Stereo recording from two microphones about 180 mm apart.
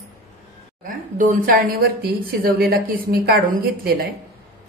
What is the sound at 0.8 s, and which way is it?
A woman's voice, 45° right (ahead or behind).